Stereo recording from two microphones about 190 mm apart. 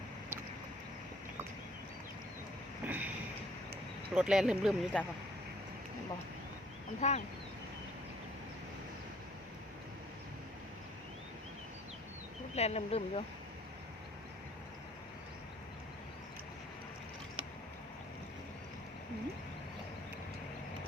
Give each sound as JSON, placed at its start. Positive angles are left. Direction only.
{"t": 2.8, "sound": "a sound", "side_deg": -10}
{"t": 4.1, "sound": "speech", "side_deg": -5}
{"t": 7.0, "sound": "speech", "side_deg": 35}
{"t": 12.5, "sound": "speech", "side_deg": 35}